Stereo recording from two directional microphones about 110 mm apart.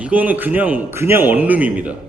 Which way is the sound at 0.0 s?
15° right (ahead or behind).